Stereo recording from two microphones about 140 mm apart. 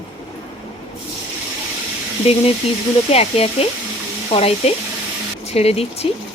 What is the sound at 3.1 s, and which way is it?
Speech, 45° left (ahead or behind).